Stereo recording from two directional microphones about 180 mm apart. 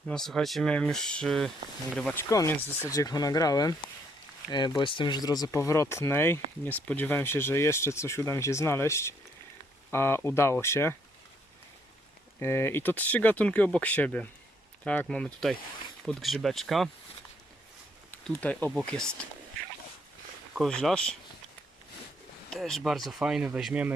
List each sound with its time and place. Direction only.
0.1 s speech: 5° left (ahead or behind)
2.1 s speech: 15° left (ahead or behind)
12.4 s speech: 15° left (ahead or behind)
18.3 s speech: 10° left (ahead or behind)
20.6 s speech: centre (ahead or behind)
22.4 s speech: centre (ahead or behind)